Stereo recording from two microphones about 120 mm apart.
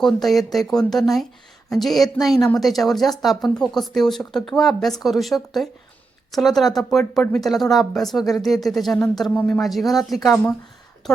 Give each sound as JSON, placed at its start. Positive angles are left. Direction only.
{"t": 0.0, "sound": "speech", "side_deg": 0}
{"t": 10.2, "sound": "speech", "side_deg": 30}
{"t": 11.1, "sound": "speech", "side_deg": 0}